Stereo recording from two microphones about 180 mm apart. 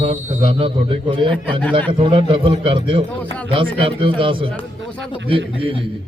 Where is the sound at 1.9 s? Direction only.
30° right (ahead or behind).